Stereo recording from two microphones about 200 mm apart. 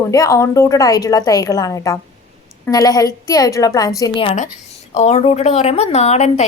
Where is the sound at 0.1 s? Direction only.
15° left (ahead or behind).